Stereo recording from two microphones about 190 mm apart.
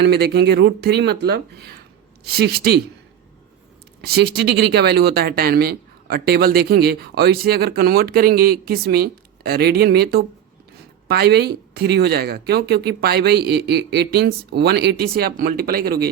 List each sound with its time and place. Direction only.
0.0 s speech: 60° right (ahead or behind)
4.0 s speech: 55° right (ahead or behind)